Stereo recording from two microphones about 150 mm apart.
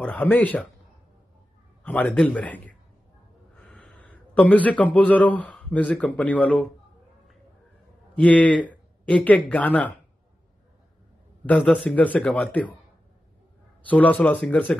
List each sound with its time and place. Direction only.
0.0 s a man's voice: 10° left (ahead or behind)
1.8 s a man's voice: 10° left (ahead or behind)
8.2 s a man's voice: 10° left (ahead or behind)
11.4 s a man's voice: 10° left (ahead or behind)
13.8 s a man's voice: 10° left (ahead or behind)